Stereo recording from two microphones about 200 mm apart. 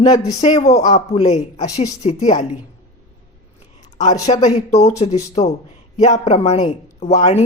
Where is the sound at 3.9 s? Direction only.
35° left (ahead or behind).